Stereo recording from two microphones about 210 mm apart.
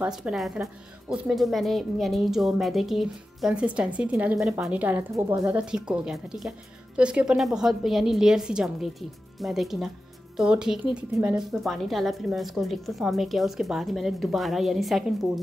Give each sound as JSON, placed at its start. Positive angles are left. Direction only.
{"t": 0.0, "sound": "a woman's voice", "side_deg": -5}
{"t": 5.7, "sound": "a woman's voice", "side_deg": -5}